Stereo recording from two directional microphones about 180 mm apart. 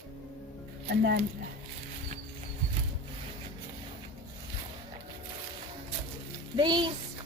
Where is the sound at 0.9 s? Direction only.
60° right (ahead or behind).